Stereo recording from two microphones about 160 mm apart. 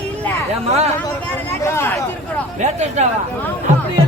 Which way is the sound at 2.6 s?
45° right (ahead or behind).